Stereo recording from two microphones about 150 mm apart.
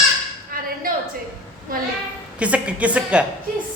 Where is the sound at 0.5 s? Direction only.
70° right (ahead or behind).